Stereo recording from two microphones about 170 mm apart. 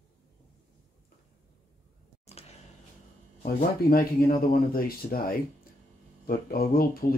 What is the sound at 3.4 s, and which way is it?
Speech, 60° left (ahead or behind).